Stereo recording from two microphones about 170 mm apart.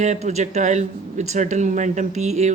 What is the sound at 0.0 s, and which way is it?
Speech, 45° right (ahead or behind).